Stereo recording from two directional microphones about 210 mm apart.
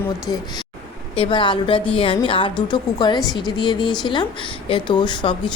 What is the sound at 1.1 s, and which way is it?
A woman's voice, 25° left (ahead or behind).